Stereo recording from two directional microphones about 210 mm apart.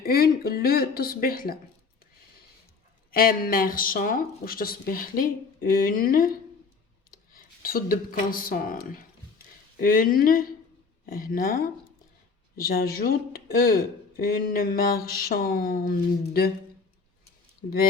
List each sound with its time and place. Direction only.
0.0 s speech: 45° left (ahead or behind)
3.1 s speech: 45° left (ahead or behind)
7.3 s speech: 45° left (ahead or behind)
12.5 s speech: 45° left (ahead or behind)